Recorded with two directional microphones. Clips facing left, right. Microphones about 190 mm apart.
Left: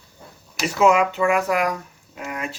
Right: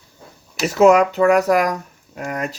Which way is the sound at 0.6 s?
40° right (ahead or behind).